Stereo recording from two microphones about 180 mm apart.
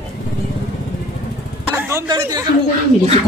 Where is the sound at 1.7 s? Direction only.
15° right (ahead or behind).